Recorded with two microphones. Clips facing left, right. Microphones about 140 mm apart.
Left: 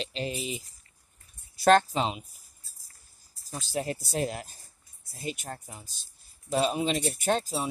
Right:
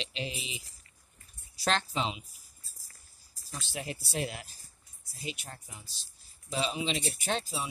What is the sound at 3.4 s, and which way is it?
Speech, 40° left (ahead or behind).